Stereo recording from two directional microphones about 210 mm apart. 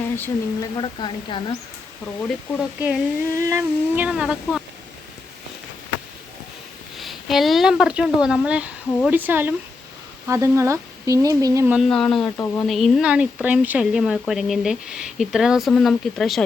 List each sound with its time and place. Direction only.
0.2 s speech: 20° left (ahead or behind)
2.2 s speech: 5° right (ahead or behind)
3.3 s speech: 15° right (ahead or behind)
6.9 s speech: centre (ahead or behind)